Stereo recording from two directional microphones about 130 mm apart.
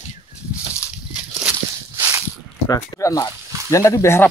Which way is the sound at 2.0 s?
20° right (ahead or behind).